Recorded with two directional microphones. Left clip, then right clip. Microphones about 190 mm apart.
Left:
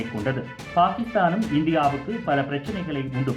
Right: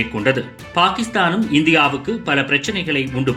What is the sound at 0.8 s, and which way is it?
Speech, 20° right (ahead or behind).